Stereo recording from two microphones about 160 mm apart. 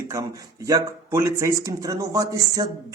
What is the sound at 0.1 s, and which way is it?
Speech, 20° right (ahead or behind).